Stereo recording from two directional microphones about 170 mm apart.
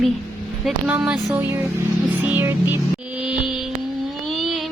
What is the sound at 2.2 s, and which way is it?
Music, 10° right (ahead or behind).